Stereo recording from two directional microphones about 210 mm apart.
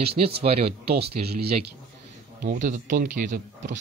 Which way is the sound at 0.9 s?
50° right (ahead or behind).